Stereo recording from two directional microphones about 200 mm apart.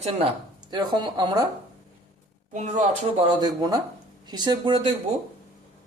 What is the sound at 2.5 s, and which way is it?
Speech, 35° right (ahead or behind).